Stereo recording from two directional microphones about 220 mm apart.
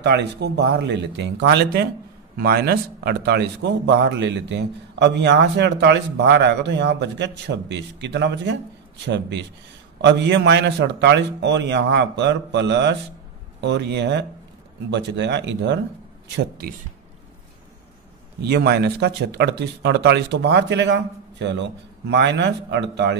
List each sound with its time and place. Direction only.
0.0 s a man's voice: 50° right (ahead or behind)
18.4 s a man's voice: 50° right (ahead or behind)